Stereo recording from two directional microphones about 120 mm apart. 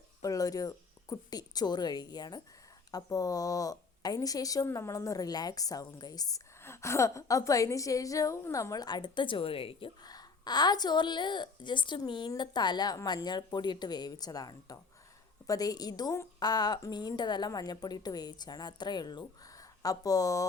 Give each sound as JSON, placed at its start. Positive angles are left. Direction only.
{"t": 0.2, "sound": "a woman's voice", "side_deg": 30}
{"t": 10.0, "sound": "a woman's voice", "side_deg": 35}